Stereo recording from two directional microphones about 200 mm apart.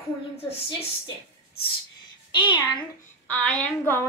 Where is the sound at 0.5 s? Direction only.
30° left (ahead or behind).